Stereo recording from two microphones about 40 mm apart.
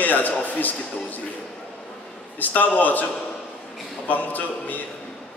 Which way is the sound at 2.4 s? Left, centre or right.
Left.